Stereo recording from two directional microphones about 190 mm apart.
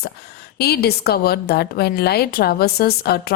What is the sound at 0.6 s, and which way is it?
A woman's voice, 55° left (ahead or behind).